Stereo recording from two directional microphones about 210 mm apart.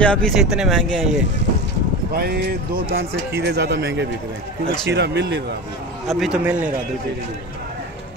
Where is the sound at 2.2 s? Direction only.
50° right (ahead or behind).